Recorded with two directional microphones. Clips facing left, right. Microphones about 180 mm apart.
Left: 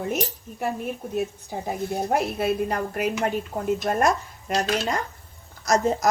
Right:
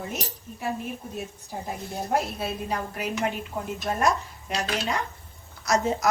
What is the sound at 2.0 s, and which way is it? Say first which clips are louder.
Speech: left 2 dB; 60° left (ahead or behind).